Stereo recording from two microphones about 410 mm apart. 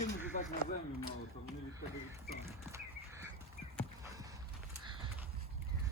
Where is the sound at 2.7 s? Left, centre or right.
Centre.